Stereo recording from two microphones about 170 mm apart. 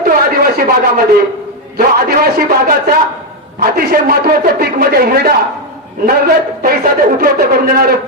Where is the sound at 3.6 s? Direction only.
60° right (ahead or behind).